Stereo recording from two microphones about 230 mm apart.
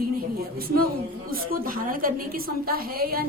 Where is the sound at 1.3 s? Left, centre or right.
Right.